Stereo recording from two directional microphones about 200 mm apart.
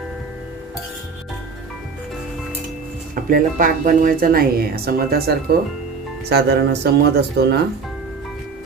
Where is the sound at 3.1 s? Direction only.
45° right (ahead or behind).